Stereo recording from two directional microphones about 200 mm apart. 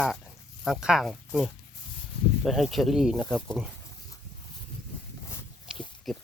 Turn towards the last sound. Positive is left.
turn(degrees=0)  # may be behind; listen again after turning